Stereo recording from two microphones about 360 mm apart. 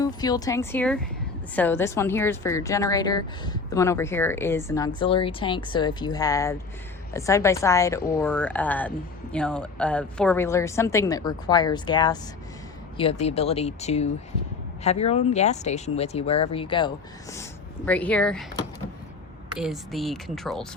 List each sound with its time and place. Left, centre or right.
0.0 s a woman's voice: centre